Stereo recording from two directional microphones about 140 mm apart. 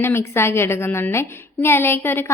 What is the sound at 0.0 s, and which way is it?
A woman's voice, 15° left (ahead or behind).